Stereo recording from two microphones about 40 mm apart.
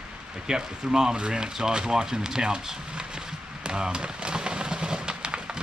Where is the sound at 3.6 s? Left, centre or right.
Right.